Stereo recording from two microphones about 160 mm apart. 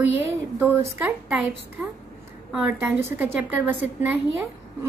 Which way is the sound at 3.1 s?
10° right (ahead or behind).